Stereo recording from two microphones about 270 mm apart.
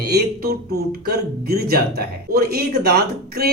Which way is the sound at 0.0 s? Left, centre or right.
Right.